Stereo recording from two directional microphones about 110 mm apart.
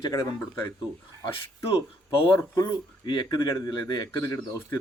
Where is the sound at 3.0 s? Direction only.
40° left (ahead or behind).